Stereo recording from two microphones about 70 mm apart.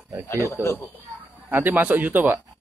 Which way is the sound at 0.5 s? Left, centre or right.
Left.